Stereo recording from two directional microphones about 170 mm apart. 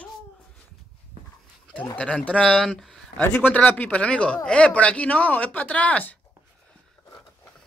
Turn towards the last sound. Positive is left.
turn(degrees=10)  # may be behind; listen again after turning